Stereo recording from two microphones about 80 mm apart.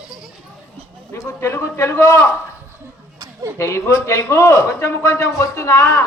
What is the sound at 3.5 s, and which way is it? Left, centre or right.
A man's voice, left.